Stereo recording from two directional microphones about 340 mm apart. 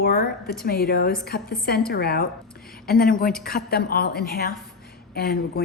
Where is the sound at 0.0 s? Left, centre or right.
Left.